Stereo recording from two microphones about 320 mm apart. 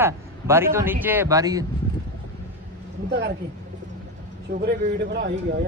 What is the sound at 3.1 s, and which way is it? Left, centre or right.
Speech, right.